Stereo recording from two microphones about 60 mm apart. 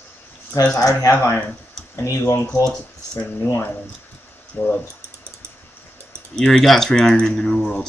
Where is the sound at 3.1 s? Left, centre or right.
Left.